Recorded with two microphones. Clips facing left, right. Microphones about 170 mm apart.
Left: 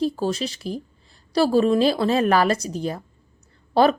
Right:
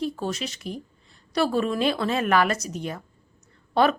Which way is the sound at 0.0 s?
35° left (ahead or behind).